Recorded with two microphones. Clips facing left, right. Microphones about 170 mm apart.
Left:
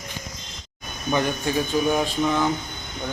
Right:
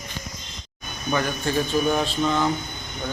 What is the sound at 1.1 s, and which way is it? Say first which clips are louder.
Speech: left 1 dB; 15° left (ahead or behind).